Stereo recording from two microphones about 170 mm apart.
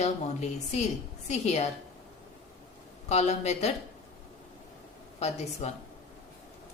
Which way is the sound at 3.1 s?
40° left (ahead or behind).